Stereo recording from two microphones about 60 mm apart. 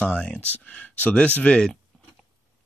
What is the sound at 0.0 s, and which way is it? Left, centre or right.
Speech, left.